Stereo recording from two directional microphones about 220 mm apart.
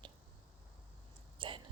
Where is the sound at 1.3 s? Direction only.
25° right (ahead or behind).